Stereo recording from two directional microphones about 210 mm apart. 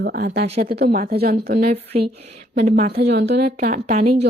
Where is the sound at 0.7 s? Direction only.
50° right (ahead or behind).